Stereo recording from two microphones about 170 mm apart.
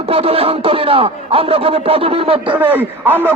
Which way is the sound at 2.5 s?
10° right (ahead or behind).